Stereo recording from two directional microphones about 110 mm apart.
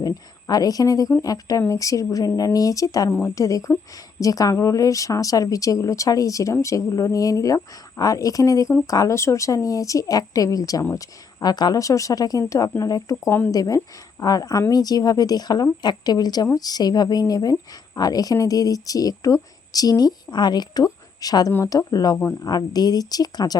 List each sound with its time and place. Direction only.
0.0 s a woman's voice: 35° left (ahead or behind)
3.1 s speech: 15° left (ahead or behind)
3.3 s a woman's voice: 30° left (ahead or behind)
13.2 s speech: 15° left (ahead or behind)
13.5 s a woman's voice: 35° left (ahead or behind)